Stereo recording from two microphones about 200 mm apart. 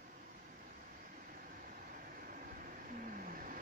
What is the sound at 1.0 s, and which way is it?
Vehicle, 45° right (ahead or behind).